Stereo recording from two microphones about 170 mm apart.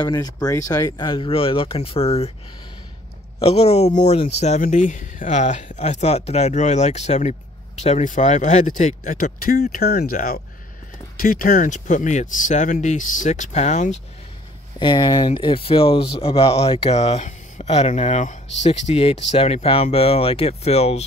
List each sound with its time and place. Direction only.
0.0 s speech: 25° left (ahead or behind)
3.3 s speech: 35° left (ahead or behind)
14.8 s speech: 25° left (ahead or behind)